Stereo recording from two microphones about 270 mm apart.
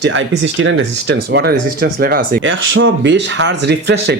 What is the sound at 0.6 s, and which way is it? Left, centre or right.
Speech, right.